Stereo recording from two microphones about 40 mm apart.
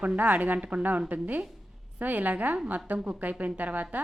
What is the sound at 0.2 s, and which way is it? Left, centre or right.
A woman's voice, right.